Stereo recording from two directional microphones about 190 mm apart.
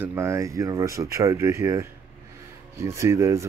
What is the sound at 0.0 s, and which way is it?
Speech, 10° right (ahead or behind).